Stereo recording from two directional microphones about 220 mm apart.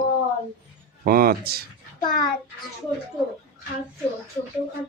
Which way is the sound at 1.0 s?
40° right (ahead or behind).